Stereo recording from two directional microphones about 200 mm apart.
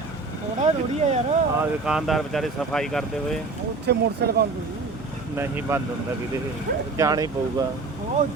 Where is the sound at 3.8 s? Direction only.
55° right (ahead or behind).